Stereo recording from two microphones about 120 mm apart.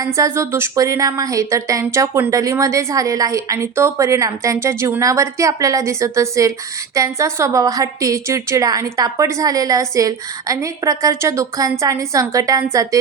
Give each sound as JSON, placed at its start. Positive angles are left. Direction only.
{"t": 0.0, "sound": "a woman's voice", "side_deg": -25}